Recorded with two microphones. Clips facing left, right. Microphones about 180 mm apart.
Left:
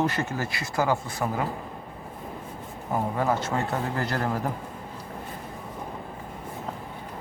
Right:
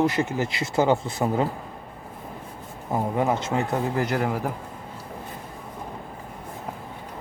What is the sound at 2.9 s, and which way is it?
Speech, 20° right (ahead or behind).